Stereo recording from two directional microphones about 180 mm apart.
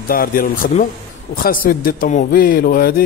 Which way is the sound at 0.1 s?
55° left (ahead or behind).